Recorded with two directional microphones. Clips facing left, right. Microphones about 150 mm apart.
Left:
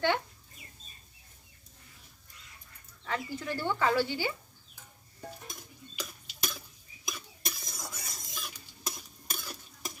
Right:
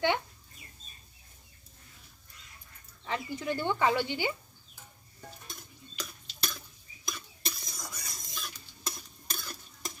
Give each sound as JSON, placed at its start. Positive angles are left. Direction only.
{"t": 3.0, "sound": "speech", "side_deg": -20}
{"t": 6.0, "sound": "tick-tock", "side_deg": 10}
{"t": 7.0, "sound": "stir", "side_deg": 5}